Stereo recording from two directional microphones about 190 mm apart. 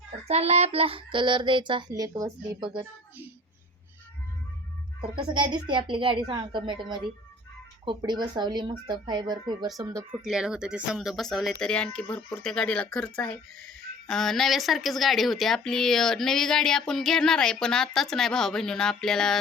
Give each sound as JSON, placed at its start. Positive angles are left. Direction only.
{"t": 0.3, "sound": "child singing", "side_deg": -35}
{"t": 5.1, "sound": "child singing", "side_deg": -25}
{"t": 7.9, "sound": "child singing", "side_deg": -25}
{"t": 10.2, "sound": "a woman's voice", "side_deg": -5}